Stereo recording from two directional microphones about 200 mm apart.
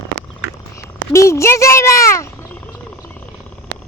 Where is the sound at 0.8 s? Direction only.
15° left (ahead or behind).